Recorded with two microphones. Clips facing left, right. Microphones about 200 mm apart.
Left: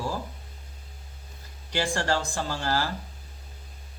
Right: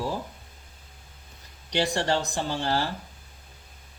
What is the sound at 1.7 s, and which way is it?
A man's voice, 20° right (ahead or behind).